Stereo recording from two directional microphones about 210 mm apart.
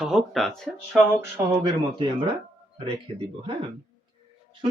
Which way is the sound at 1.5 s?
20° right (ahead or behind).